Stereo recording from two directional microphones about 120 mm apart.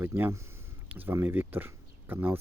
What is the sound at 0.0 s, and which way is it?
Speech, 20° right (ahead or behind).